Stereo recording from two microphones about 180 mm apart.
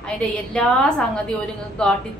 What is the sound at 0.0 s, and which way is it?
A woman's voice, 5° left (ahead or behind).